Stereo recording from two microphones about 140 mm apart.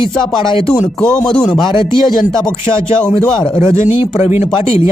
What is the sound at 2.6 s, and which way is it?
A man's voice, 20° right (ahead or behind).